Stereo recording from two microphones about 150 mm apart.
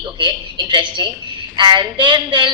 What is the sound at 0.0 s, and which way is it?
A woman's voice, 30° right (ahead or behind).